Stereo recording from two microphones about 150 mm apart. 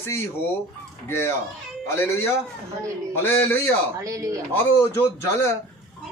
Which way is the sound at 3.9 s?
20° right (ahead or behind).